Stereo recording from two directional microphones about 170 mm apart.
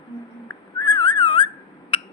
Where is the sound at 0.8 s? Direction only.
25° left (ahead or behind).